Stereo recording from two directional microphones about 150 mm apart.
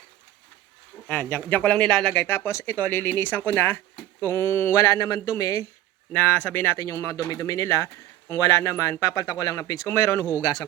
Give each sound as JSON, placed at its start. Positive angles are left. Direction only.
{"t": 1.0, "sound": "speech", "side_deg": 10}